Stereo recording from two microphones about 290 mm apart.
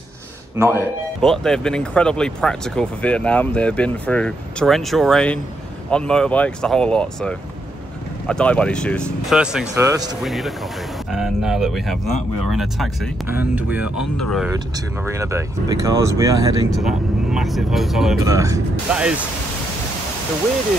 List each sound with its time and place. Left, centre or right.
0.6 s speech: centre
10.2 s speech: centre
15.0 s speech: centre
16.7 s speech: centre
18.2 s speech: centre